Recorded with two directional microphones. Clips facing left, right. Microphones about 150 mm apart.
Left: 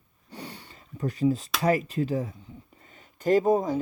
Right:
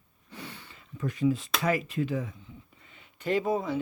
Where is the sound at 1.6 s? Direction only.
40° left (ahead or behind).